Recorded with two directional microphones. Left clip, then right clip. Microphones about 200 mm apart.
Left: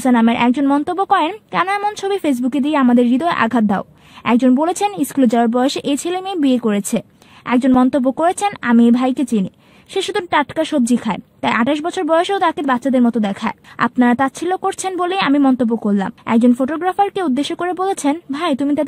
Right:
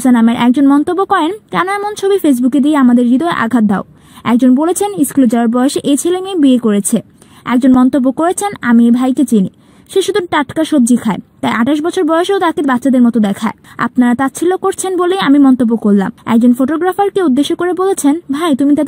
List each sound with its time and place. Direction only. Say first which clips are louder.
0.0 s a woman's voice: right 3 dB; 25° right (ahead or behind)